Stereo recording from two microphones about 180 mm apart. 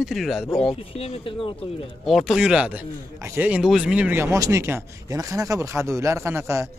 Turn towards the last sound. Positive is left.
turn(degrees=-15)  # may be behind; listen again after turning